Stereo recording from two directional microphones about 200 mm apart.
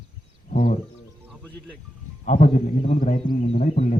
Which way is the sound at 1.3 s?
5° left (ahead or behind).